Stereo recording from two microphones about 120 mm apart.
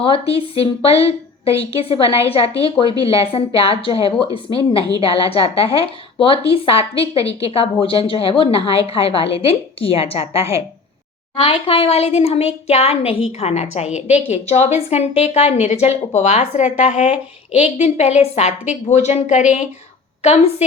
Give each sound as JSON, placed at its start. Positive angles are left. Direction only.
{"t": 0.0, "sound": "a woman's voice", "side_deg": 50}
{"t": 16.7, "sound": "a woman's voice", "side_deg": 85}
{"t": 20.2, "sound": "a woman's voice", "side_deg": 70}